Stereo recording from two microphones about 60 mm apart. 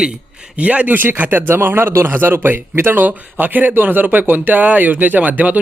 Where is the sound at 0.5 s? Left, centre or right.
Right.